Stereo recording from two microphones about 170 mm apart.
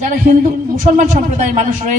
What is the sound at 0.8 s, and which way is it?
A man's voice, 45° right (ahead or behind).